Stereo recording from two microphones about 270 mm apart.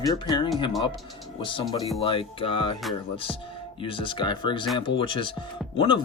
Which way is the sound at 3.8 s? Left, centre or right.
Centre.